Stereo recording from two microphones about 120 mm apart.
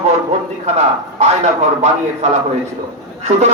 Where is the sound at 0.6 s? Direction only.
65° right (ahead or behind).